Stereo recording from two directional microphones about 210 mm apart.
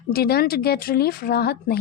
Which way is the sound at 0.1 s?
50° left (ahead or behind).